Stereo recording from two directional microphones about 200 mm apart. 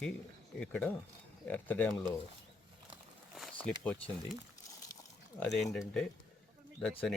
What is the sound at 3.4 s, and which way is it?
Speech, 5° left (ahead or behind).